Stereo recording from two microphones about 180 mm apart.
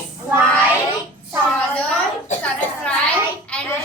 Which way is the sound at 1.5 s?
5° left (ahead or behind).